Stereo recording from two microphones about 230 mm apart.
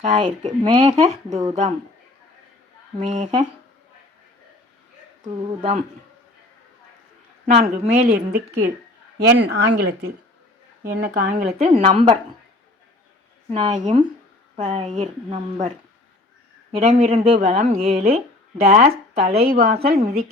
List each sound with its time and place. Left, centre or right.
0.3 s speech: right
3.0 s a woman's voice: right
5.5 s speech: right
7.4 s a woman's voice: right
11.6 s speech: right
13.5 s a woman's voice: right
16.7 s a woman's voice: right
17.1 s a woman's voice: right